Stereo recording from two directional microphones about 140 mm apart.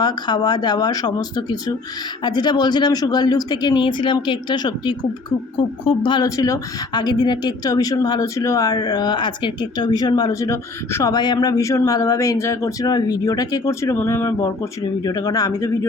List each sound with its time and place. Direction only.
0.0 s speech: 30° left (ahead or behind)